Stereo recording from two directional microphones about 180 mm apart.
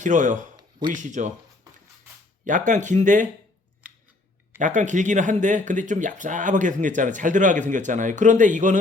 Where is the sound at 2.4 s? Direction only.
45° right (ahead or behind).